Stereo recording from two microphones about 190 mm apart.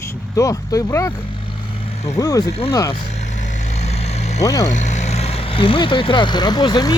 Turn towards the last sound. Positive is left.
turn(degrees=20)  # may be behind; listen again after turning